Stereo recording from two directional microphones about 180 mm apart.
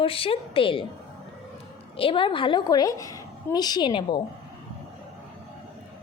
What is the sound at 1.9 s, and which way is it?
A woman's voice, 30° left (ahead or behind).